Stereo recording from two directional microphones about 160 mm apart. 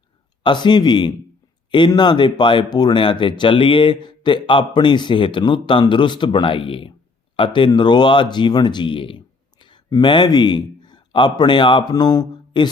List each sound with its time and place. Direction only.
0.4 s speech: 30° left (ahead or behind)